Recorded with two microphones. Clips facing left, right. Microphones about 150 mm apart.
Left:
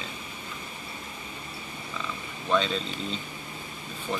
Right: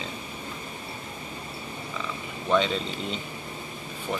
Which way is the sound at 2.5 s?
15° right (ahead or behind).